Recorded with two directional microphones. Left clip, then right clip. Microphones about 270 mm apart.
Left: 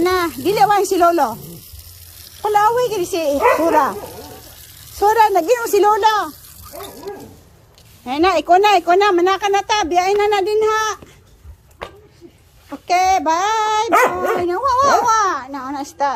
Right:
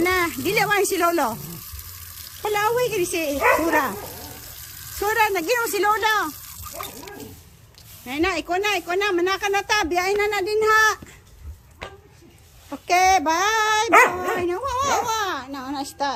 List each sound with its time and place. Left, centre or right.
0.0 s a sound: centre
2.4 s speech: centre
5.0 s speech: centre
8.0 s speech: centre
12.7 s speech: centre
13.9 s speech: left
14.4 s speech: centre